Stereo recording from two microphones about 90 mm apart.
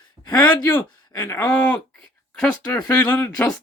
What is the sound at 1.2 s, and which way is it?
Speech, 35° left (ahead or behind).